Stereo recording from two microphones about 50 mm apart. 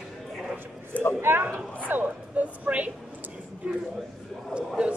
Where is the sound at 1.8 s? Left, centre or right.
Right.